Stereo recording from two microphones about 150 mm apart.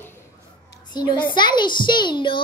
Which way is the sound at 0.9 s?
30° left (ahead or behind).